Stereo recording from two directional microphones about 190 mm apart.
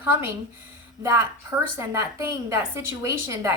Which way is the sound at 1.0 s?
15° right (ahead or behind).